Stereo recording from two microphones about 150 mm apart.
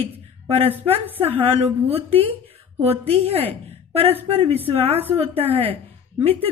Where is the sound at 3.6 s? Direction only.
40° right (ahead or behind).